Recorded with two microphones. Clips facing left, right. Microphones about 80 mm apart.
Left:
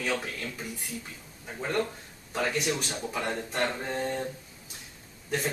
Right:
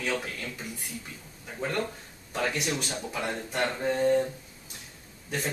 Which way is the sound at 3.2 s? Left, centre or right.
Centre.